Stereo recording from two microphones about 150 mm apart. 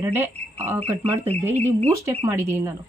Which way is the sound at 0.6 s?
40° right (ahead or behind).